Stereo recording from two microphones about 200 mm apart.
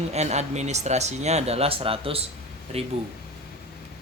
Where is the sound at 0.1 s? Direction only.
35° right (ahead or behind).